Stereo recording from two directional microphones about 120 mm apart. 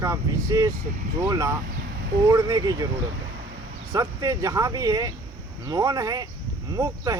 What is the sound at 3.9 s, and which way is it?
Speech, 30° right (ahead or behind).